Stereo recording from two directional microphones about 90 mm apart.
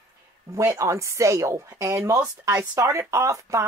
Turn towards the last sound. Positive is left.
turn(degrees=-35)  # may be behind; listen again after turning